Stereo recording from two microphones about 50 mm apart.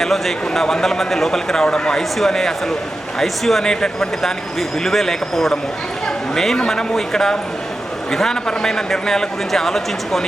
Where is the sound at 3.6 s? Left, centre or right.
Centre.